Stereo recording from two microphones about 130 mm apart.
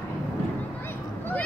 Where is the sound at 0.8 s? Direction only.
15° left (ahead or behind).